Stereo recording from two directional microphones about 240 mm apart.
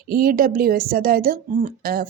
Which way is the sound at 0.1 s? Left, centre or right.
Right.